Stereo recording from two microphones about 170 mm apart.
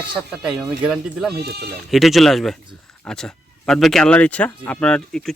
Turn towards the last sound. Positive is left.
turn(degrees=5)  # may be behind; listen again after turning